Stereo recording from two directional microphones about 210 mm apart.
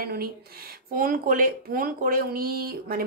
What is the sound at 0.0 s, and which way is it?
Speech, 45° right (ahead or behind).